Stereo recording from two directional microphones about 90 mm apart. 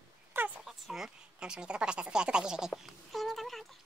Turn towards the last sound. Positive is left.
turn(degrees=0)  # may be behind; listen again after turning